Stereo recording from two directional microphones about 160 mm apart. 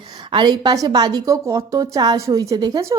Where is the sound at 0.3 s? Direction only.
30° right (ahead or behind).